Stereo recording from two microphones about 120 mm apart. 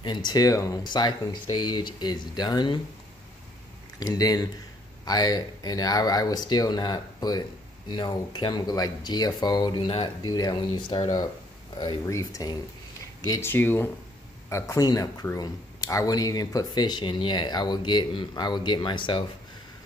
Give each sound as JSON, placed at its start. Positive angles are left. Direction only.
{"t": 0.0, "sound": "speech", "side_deg": 40}
{"t": 4.0, "sound": "speech", "side_deg": 30}
{"t": 9.8, "sound": "speech", "side_deg": 55}
{"t": 10.2, "sound": "speech", "side_deg": 30}
{"t": 13.4, "sound": "speech", "side_deg": 20}
{"t": 14.5, "sound": "speech", "side_deg": 30}